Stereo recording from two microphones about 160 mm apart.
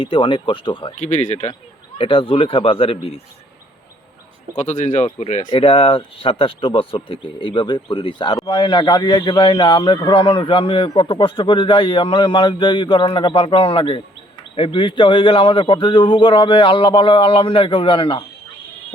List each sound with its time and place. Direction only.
0.0 s a man's voice: 30° left (ahead or behind)
0.9 s speech: 50° left (ahead or behind)
2.0 s a man's voice: 35° left (ahead or behind)
4.5 s speech: 50° left (ahead or behind)
5.5 s a man's voice: 35° left (ahead or behind)